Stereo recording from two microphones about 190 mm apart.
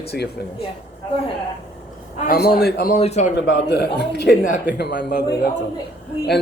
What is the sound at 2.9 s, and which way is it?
Speech, 35° left (ahead or behind).